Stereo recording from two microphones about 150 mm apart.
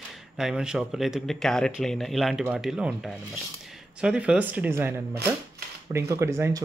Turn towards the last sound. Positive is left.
turn(degrees=-20)  # may be behind; listen again after turning